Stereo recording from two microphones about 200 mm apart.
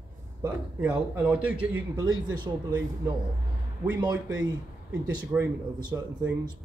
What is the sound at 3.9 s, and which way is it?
A man's voice, 15° right (ahead or behind).